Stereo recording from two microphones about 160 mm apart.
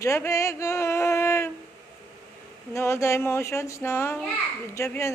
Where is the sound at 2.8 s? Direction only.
15° left (ahead or behind).